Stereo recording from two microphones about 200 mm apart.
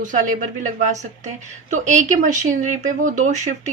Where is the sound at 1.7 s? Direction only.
35° right (ahead or behind).